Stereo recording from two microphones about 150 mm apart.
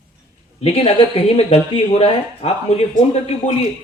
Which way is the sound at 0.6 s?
40° left (ahead or behind).